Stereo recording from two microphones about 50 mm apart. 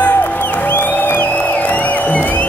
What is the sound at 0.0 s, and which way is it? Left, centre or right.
Music, left.